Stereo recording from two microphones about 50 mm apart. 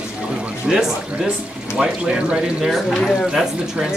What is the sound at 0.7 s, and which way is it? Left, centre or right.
Speech, centre.